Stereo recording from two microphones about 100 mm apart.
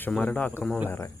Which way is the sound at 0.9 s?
25° left (ahead or behind).